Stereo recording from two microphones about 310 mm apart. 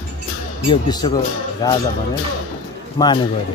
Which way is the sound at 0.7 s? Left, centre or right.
Centre.